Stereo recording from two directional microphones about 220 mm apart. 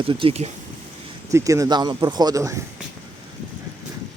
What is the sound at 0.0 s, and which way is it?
Speech, 25° right (ahead or behind).